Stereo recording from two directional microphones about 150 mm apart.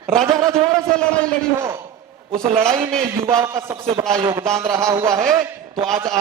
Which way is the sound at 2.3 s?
20° right (ahead or behind).